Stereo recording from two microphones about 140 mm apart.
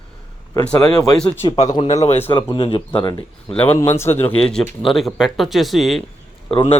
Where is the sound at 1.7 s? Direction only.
45° left (ahead or behind).